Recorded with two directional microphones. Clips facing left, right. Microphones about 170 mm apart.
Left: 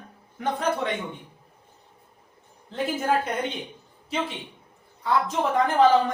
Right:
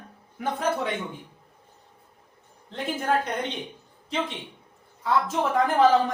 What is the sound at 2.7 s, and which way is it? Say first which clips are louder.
Speech: left 1 dB; 5° left (ahead or behind).